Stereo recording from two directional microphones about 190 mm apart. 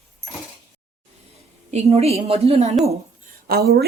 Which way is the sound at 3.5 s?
55° right (ahead or behind).